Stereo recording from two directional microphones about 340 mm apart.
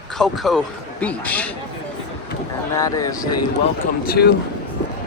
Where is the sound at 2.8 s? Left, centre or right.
Centre.